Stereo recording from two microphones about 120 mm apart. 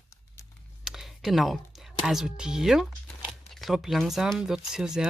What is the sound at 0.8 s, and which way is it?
Speech, 5° right (ahead or behind).